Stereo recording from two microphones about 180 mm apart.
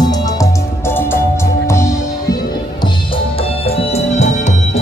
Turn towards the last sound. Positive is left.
turn(degrees=40)  # may be behind; listen again after turning